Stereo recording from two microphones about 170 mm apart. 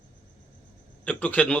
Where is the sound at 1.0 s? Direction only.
10° left (ahead or behind).